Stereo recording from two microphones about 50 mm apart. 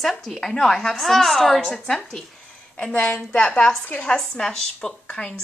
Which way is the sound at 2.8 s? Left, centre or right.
Left.